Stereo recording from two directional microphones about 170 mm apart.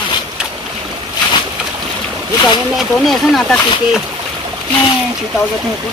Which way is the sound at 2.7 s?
Centre (ahead or behind).